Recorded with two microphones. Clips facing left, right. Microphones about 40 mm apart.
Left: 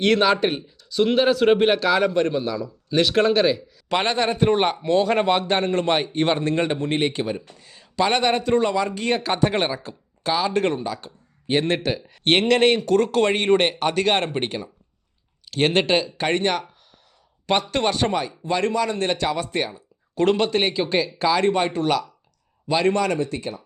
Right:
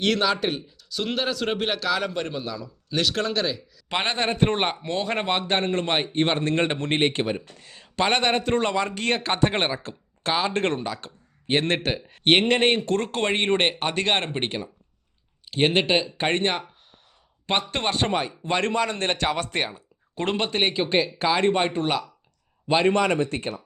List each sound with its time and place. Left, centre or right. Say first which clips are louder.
0.0 s a man's voice: left 4 dB; centre
3.8 s a man's voice: left 4 dB; right
6.4 s a man's voice: left 2 dB; right
12.2 s a man's voice: left 2 dB; right
15.4 s speech: left 2 dB; centre
16.1 s a man's voice: left 2 dB; right
20.1 s a man's voice: left 5 dB; right